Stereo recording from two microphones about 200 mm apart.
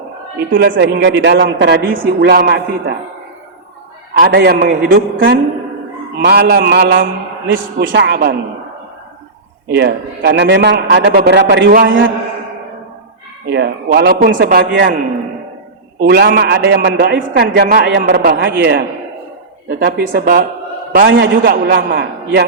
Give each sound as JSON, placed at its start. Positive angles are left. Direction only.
{"t": 0.5, "sound": "a man's voice", "side_deg": -55}
{"t": 4.2, "sound": "a man's voice", "side_deg": -55}
{"t": 9.6, "sound": "a man's voice", "side_deg": -55}
{"t": 13.5, "sound": "speech", "side_deg": -60}
{"t": 16.0, "sound": "a man's voice", "side_deg": -55}
{"t": 21.4, "sound": "speech", "side_deg": -50}